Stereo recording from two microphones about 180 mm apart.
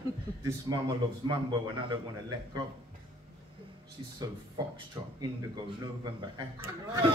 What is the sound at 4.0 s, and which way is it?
Speech, 25° right (ahead or behind).